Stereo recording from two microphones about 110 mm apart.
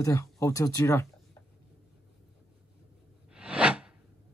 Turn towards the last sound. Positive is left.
turn(degrees=-10)  # may be behind; listen again after turning